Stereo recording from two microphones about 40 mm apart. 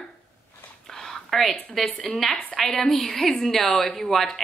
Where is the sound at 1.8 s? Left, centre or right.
Centre.